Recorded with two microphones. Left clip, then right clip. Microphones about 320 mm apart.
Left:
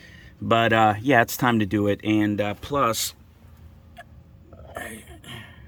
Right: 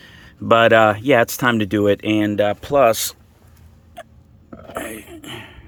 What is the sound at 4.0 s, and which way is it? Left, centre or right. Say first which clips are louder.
Creak: right 7 dB; centre.